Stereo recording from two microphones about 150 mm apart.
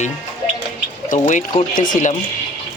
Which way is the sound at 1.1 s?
55° left (ahead or behind).